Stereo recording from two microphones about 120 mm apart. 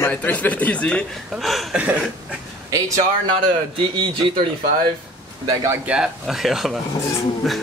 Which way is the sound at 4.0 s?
45° right (ahead or behind).